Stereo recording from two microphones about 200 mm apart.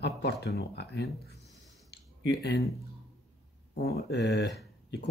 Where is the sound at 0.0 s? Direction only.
55° left (ahead or behind).